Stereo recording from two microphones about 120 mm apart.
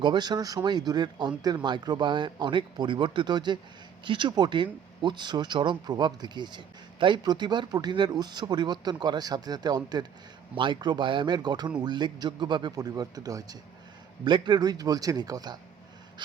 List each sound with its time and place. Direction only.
0.0 s speech: 40° right (ahead or behind)
14.3 s speech: 40° right (ahead or behind)